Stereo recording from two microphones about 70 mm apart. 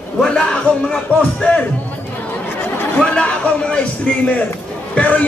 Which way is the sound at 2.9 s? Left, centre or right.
Centre.